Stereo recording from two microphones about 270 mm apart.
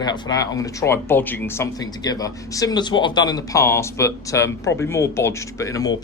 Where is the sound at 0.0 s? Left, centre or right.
Centre.